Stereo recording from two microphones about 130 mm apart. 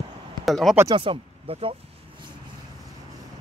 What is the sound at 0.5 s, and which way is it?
Speech, centre (ahead or behind).